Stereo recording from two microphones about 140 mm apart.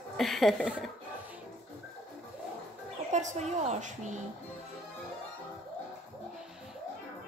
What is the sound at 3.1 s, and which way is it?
Speech, 60° right (ahead or behind).